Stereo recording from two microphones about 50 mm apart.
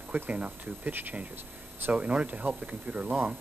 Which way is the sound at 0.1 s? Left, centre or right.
Right.